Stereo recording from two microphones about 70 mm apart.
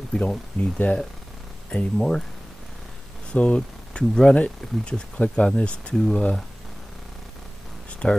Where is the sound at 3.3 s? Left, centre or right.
Centre.